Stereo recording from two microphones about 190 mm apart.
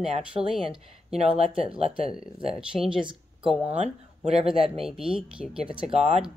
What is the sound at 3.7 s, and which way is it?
Speech, 35° right (ahead or behind).